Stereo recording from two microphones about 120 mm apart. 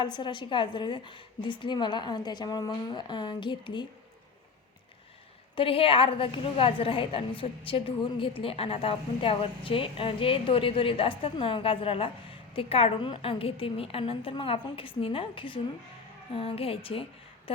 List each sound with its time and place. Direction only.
0.0 s a woman's voice: 40° left (ahead or behind)
5.5 s a woman's voice: 50° left (ahead or behind)